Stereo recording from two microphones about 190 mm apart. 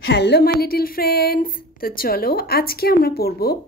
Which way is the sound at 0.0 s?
65° left (ahead or behind).